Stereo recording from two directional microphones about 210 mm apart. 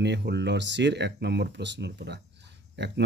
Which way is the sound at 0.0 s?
55° right (ahead or behind).